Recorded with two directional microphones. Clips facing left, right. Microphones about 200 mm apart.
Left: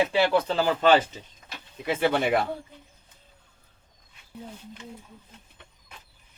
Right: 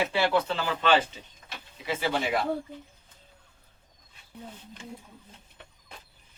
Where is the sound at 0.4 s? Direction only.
40° left (ahead or behind).